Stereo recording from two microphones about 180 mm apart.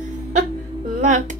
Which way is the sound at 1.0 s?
40° right (ahead or behind).